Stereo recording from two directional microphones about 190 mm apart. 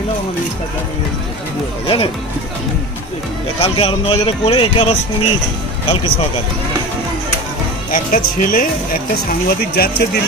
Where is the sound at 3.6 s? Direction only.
30° left (ahead or behind).